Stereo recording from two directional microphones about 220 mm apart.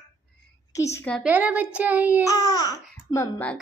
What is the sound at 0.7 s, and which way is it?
Speech, 15° left (ahead or behind).